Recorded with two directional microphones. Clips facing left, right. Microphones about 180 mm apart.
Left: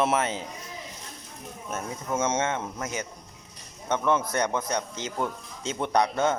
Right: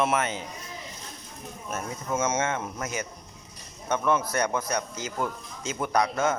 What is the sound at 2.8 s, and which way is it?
Speech, 20° left (ahead or behind).